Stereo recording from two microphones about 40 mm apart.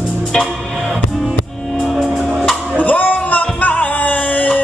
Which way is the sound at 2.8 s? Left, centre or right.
Left.